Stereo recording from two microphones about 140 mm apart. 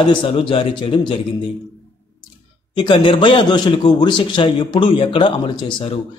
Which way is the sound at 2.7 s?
35° left (ahead or behind).